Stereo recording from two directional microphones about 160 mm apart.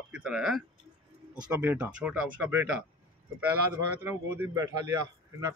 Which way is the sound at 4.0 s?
15° right (ahead or behind).